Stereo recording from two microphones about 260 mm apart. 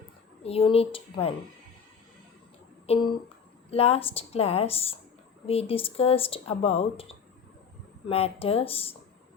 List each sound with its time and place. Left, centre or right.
0.4 s speech: left
2.8 s speech: centre